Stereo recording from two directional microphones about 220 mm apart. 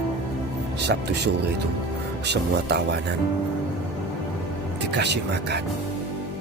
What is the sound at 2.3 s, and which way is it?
Speech, 50° right (ahead or behind).